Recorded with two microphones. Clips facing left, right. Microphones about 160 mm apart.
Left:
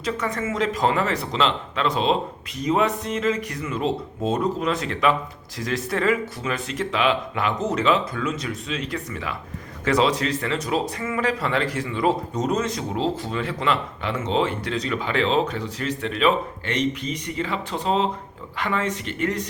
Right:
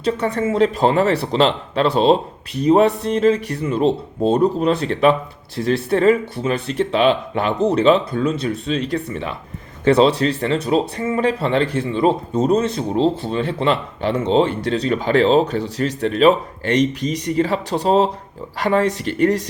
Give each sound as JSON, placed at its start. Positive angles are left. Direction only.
{"t": 0.0, "sound": "speech", "side_deg": -30}